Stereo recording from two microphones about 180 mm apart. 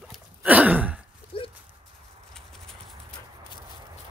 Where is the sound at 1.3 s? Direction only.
30° left (ahead or behind).